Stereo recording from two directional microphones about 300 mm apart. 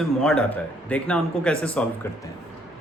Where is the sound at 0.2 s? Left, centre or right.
Centre.